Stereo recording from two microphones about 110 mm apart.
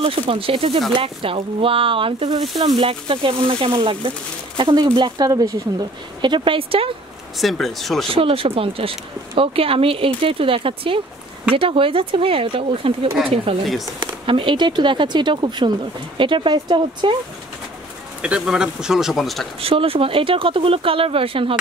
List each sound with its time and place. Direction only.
0.0 s speech: 60° right (ahead or behind)
7.3 s speech: centre (ahead or behind)
8.1 s speech: 60° right (ahead or behind)
13.9 s speech: 50° right (ahead or behind)
18.2 s speech: 10° right (ahead or behind)
19.6 s speech: 60° right (ahead or behind)